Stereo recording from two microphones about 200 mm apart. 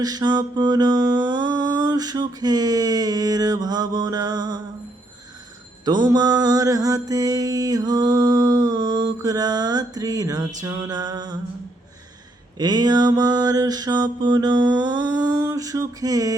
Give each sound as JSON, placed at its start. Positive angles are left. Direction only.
{"t": 0.0, "sound": "mantra", "side_deg": -20}
{"t": 5.8, "sound": "mantra", "side_deg": -20}
{"t": 12.5, "sound": "mantra", "side_deg": -20}